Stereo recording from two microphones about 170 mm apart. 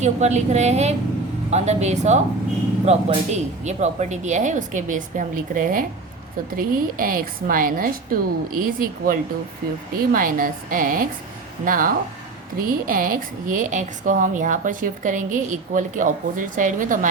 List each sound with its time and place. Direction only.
0.0 s a woman's voice: 40° right (ahead or behind)